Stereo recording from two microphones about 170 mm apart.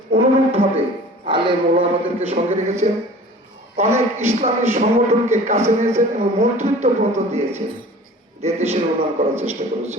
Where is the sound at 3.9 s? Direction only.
15° right (ahead or behind).